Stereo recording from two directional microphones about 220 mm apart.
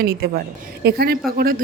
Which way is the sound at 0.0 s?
45° right (ahead or behind).